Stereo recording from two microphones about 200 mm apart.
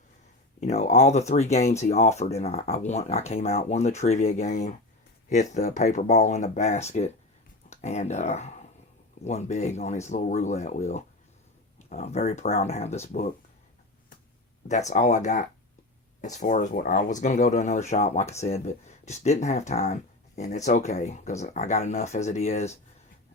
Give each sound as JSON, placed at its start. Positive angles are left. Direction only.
{"t": 0.6, "sound": "speech", "side_deg": 35}
{"t": 14.7, "sound": "speech", "side_deg": 35}